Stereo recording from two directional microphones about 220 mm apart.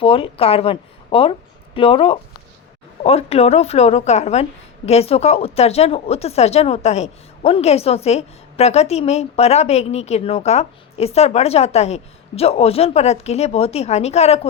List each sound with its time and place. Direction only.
0.0 s speech: 25° left (ahead or behind)